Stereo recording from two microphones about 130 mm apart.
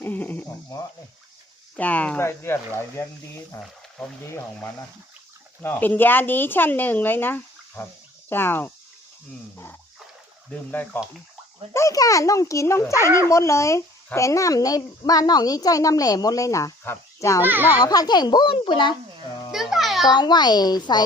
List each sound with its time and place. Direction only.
0.0 s speech: 15° left (ahead or behind)
1.7 s speech: 10° left (ahead or behind)
3.6 s speech: 10° left (ahead or behind)
5.6 s speech: 15° left (ahead or behind)
10.5 s speech: 15° left (ahead or behind)
11.7 s speech: 25° left (ahead or behind)
17.4 s a child's voice: 15° right (ahead or behind)
17.7 s a child's voice: 30° left (ahead or behind)
19.5 s music: centre (ahead or behind)
20.1 s a child's voice: 35° left (ahead or behind)